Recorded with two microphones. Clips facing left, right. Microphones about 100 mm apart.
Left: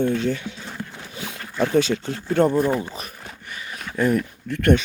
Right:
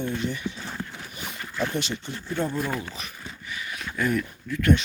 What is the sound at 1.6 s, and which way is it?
Speech, 90° left.